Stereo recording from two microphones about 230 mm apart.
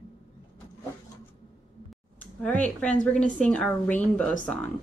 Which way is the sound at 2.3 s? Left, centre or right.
Centre.